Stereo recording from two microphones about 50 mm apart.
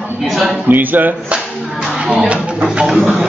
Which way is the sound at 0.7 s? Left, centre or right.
Right.